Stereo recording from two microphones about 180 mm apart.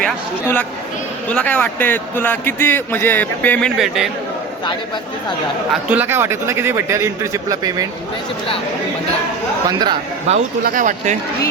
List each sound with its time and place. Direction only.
0.0 s speech: 10° left (ahead or behind)
3.8 s a man's voice: centre (ahead or behind)
5.9 s a man's voice: 10° right (ahead or behind)
9.6 s a man's voice: 25° right (ahead or behind)
10.3 s speech: 35° right (ahead or behind)
10.6 s speech: 50° right (ahead or behind)